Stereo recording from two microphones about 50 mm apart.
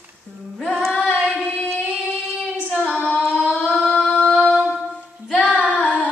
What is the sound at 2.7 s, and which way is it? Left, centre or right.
Child singing, centre.